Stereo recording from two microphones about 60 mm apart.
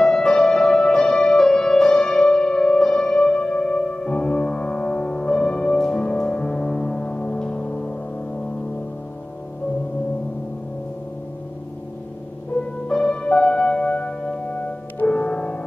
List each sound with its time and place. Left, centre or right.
0.0 s music: centre
12.8 s music: centre